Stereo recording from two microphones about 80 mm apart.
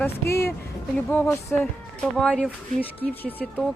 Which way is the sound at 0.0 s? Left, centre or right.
Left.